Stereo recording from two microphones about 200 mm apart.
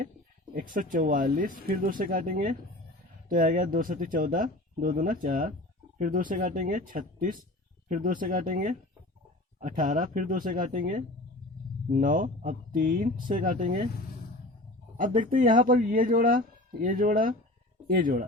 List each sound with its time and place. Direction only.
0.7 s speech: 45° right (ahead or behind)
14.9 s speech: 40° right (ahead or behind)